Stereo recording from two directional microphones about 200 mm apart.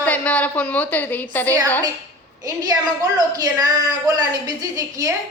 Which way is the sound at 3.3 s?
20° right (ahead or behind).